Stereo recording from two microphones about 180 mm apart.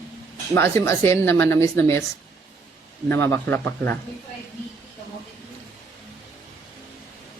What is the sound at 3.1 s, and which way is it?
Speech, 10° left (ahead or behind).